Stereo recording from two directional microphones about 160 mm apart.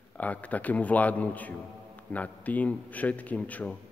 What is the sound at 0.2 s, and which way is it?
A man's voice, 10° left (ahead or behind).